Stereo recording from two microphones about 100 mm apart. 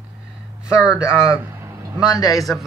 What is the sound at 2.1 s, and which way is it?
Speech, 40° left (ahead or behind).